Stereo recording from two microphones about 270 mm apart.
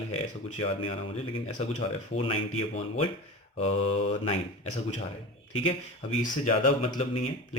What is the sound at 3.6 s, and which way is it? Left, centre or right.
Speech, left.